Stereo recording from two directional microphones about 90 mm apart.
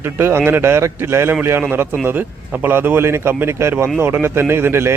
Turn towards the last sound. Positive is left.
turn(degrees=-25)  # may be behind; listen again after turning